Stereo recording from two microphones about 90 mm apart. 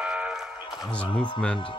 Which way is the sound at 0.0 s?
10° right (ahead or behind).